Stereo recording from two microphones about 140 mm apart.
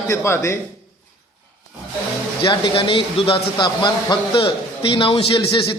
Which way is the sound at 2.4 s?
40° left (ahead or behind).